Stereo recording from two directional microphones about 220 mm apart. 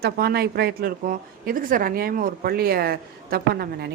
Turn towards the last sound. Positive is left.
turn(degrees=-45)  # may be behind; listen again after turning